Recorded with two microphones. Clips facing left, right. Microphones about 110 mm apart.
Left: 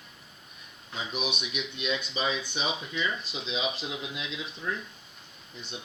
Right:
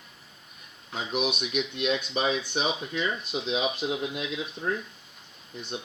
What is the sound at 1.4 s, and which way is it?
Speech, 50° right (ahead or behind).